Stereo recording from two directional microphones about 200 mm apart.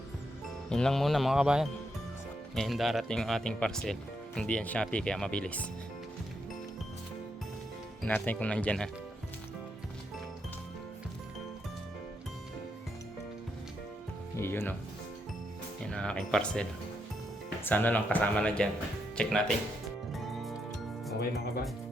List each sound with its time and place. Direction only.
0.7 s speech: 5° left (ahead or behind)
8.0 s speech: 10° left (ahead or behind)
14.3 s speech: 10° left (ahead or behind)
15.9 s speech: 5° left (ahead or behind)
17.7 s speech: 10° left (ahead or behind)